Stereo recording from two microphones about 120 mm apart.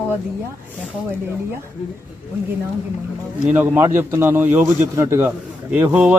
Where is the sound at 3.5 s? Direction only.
15° right (ahead or behind).